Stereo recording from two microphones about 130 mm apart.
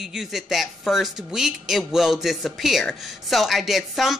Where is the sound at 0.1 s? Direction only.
5° right (ahead or behind).